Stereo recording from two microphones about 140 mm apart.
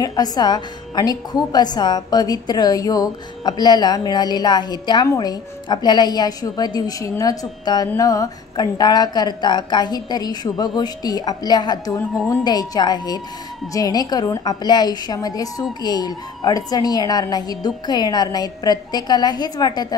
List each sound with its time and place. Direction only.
0.0 s speech: 30° left (ahead or behind)